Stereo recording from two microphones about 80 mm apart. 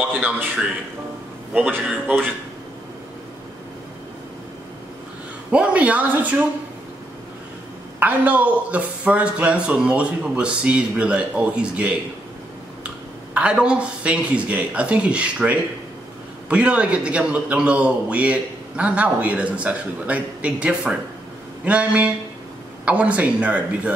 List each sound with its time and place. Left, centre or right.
0.0 s a man's voice: right
1.5 s a man's voice: centre
5.5 s speech: centre
8.0 s a man's voice: centre
13.3 s a man's voice: centre